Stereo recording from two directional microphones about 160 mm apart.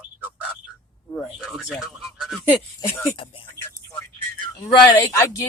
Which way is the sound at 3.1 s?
35° left (ahead or behind).